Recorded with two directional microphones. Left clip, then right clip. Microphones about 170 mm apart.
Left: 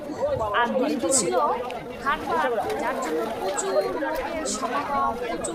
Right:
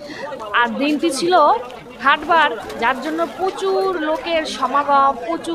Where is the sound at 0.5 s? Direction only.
20° right (ahead or behind).